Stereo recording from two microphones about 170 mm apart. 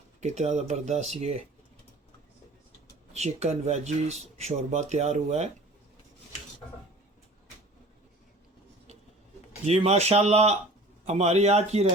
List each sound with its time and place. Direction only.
0.2 s speech: 40° right (ahead or behind)
3.1 s speech: 40° right (ahead or behind)
9.6 s speech: 40° right (ahead or behind)